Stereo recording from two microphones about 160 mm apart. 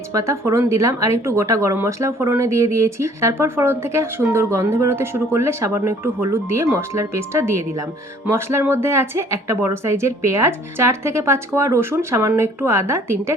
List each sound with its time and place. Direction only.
0.1 s speech: 20° right (ahead or behind)